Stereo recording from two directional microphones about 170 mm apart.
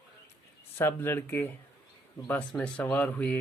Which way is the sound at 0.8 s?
15° left (ahead or behind).